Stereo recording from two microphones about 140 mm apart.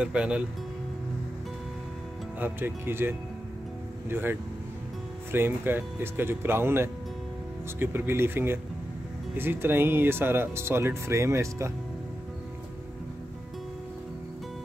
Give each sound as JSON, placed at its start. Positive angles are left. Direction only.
{"t": 0.0, "sound": "speech", "side_deg": -5}
{"t": 2.4, "sound": "speech", "side_deg": -15}